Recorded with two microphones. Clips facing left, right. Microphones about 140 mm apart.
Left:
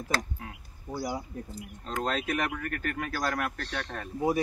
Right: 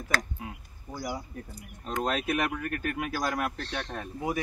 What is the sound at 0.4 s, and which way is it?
Speech, 10° right (ahead or behind).